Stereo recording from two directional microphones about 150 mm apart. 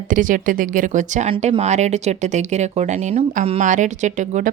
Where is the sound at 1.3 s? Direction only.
45° right (ahead or behind).